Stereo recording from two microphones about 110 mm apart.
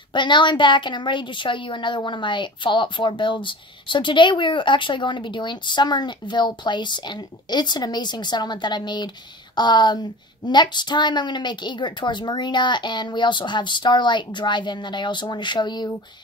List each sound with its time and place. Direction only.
0.1 s a woman's voice: 45° left (ahead or behind)